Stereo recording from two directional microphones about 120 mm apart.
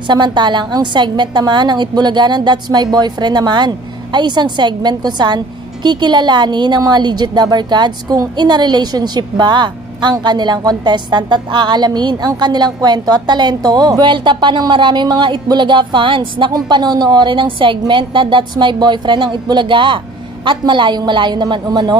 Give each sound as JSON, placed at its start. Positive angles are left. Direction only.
{"t": 0.0, "sound": "a woman's voice", "side_deg": -40}